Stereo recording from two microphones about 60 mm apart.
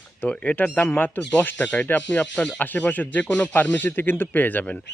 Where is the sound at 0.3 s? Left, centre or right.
Left.